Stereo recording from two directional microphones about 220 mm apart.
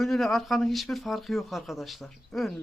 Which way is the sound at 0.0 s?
Centre (ahead or behind).